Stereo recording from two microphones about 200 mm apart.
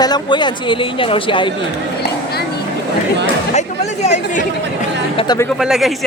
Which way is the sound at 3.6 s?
35° left (ahead or behind).